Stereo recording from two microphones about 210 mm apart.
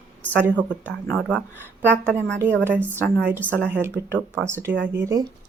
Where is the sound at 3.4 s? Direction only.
5° left (ahead or behind).